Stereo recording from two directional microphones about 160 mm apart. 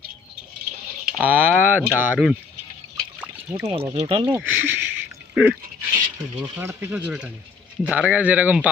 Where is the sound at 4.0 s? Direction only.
30° right (ahead or behind).